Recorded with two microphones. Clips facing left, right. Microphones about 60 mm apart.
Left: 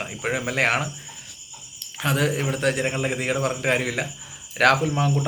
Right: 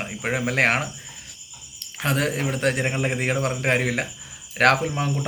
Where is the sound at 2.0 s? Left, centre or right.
Right.